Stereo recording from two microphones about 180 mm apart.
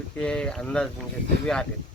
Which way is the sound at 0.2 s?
5° left (ahead or behind).